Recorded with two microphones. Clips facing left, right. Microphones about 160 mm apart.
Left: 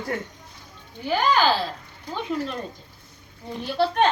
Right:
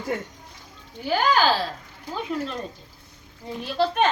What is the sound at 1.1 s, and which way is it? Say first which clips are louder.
Speech: even; 5° right (ahead or behind).